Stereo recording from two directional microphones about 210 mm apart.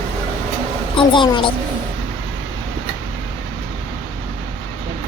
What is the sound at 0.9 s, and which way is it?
Speech, 25° left (ahead or behind).